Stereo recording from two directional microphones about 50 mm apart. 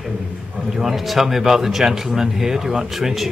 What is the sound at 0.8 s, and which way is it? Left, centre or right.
Speech, centre.